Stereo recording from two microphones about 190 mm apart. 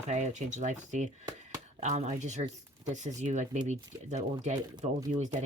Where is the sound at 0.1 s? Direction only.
40° right (ahead or behind).